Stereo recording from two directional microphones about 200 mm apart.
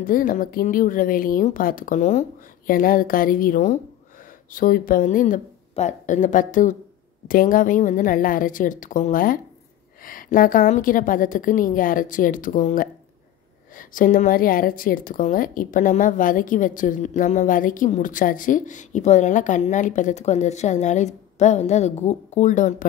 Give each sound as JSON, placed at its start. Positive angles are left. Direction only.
{"t": 0.0, "sound": "a woman's voice", "side_deg": 45}